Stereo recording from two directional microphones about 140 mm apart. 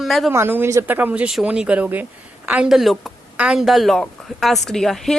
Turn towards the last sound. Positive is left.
turn(degrees=0)  # may be behind; listen again after turning